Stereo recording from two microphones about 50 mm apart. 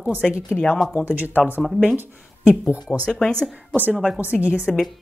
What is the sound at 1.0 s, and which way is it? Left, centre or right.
Speech, right.